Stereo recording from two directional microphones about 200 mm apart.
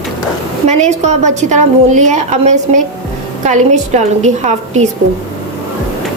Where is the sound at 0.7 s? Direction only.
35° right (ahead or behind).